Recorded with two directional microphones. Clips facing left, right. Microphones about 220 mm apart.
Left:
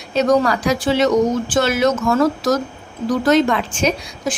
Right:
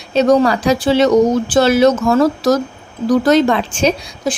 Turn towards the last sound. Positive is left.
turn(degrees=-30)  # may be behind; listen again after turning